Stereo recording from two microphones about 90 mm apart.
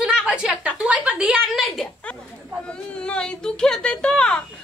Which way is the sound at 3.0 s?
10° left (ahead or behind).